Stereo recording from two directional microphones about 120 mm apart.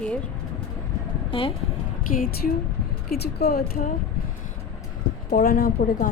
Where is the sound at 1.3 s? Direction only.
50° left (ahead or behind).